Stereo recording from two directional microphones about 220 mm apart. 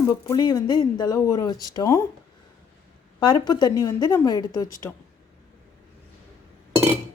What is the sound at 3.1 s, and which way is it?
Speech, 20° left (ahead or behind).